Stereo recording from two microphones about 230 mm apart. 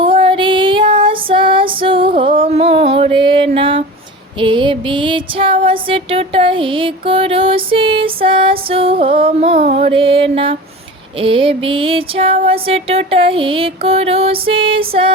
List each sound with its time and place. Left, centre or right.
0.0 s female singing: right
4.4 s music: centre